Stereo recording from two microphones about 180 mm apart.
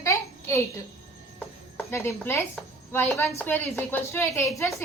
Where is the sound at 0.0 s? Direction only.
15° left (ahead or behind).